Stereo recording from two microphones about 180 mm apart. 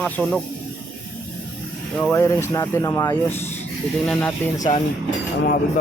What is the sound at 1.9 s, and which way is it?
Speech, 10° left (ahead or behind).